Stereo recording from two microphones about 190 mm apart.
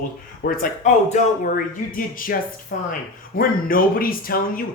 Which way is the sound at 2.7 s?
45° left (ahead or behind).